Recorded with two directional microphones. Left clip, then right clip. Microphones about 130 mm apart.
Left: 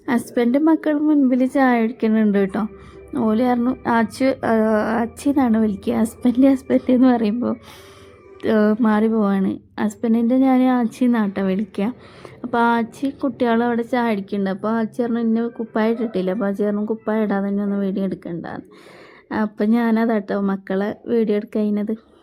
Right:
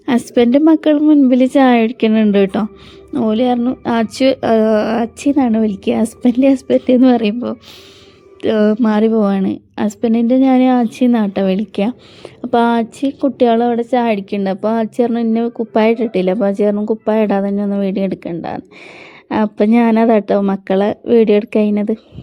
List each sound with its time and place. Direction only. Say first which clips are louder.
0.0 s a woman's voice: right 7 dB; 35° right (ahead or behind)
3.1 s a woman's voice: right 4 dB; 25° right (ahead or behind)